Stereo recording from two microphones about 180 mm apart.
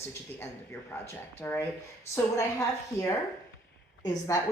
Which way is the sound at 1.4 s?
15° left (ahead or behind).